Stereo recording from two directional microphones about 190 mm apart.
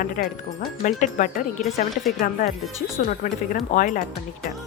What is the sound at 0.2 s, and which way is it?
Speech, 45° left (ahead or behind).